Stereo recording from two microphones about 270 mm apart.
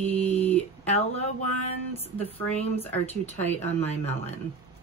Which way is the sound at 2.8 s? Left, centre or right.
Left.